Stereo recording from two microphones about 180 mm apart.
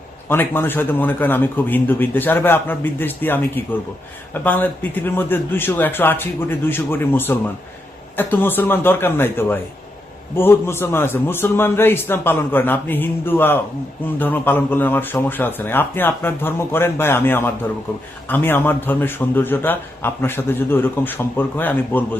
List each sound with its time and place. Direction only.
0.3 s a man's voice: 10° left (ahead or behind)